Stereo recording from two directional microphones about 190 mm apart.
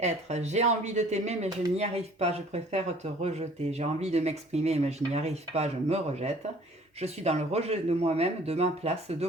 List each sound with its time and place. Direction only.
0.0 s speech: 35° right (ahead or behind)